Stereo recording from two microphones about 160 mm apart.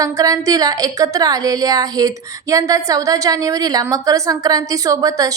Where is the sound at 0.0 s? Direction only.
20° right (ahead or behind).